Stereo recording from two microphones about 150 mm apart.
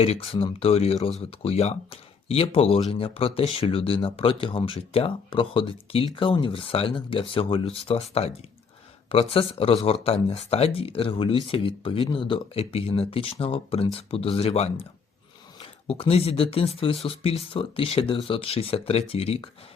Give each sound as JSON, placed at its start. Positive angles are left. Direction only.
{"t": 0.0, "sound": "speech", "side_deg": 40}
{"t": 9.3, "sound": "speech", "side_deg": 40}